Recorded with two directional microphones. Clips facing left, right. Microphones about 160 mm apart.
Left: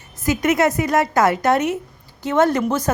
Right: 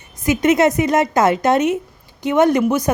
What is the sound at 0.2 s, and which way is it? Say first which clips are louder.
A woman's voice: right 3 dB; 20° right (ahead or behind).